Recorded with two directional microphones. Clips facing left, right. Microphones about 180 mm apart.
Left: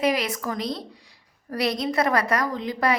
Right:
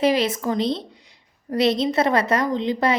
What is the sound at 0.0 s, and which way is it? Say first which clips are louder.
A woman's voice: right 4 dB; 25° right (ahead or behind).